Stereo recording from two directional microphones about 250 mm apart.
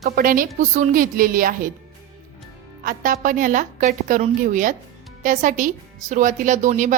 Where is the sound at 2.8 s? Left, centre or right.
Right.